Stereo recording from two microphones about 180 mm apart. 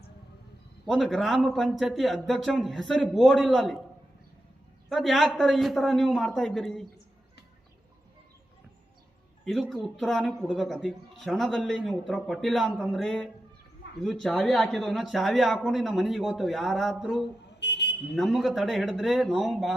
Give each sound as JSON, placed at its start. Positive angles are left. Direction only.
{"t": 0.9, "sound": "a man's voice", "side_deg": 0}
{"t": 4.9, "sound": "a man's voice", "side_deg": 0}
{"t": 9.4, "sound": "a man's voice", "side_deg": 0}
{"t": 17.6, "sound": "a sound", "side_deg": 70}
{"t": 18.1, "sound": "a man's voice", "side_deg": 0}